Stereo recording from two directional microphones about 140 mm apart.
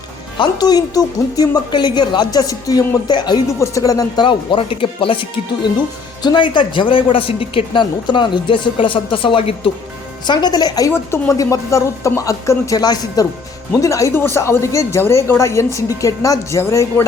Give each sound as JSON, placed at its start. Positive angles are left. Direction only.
{"t": 0.3, "sound": "a woman's voice", "side_deg": 30}
{"t": 6.2, "sound": "a woman's voice", "side_deg": 35}